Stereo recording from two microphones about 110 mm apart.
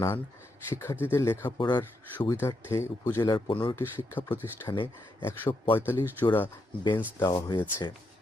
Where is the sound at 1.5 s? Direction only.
45° left (ahead or behind).